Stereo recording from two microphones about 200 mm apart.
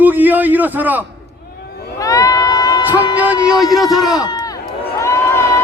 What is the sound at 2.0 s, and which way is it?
Speech, 15° left (ahead or behind).